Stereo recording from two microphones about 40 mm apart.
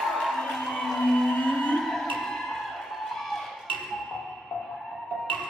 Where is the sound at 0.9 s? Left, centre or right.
Centre.